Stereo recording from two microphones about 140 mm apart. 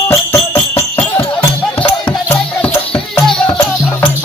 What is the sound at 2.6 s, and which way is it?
Music, 5° left (ahead or behind).